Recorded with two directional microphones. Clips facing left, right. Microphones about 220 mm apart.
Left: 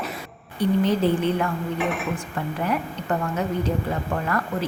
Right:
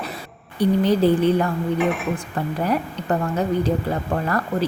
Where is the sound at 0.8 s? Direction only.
35° right (ahead or behind).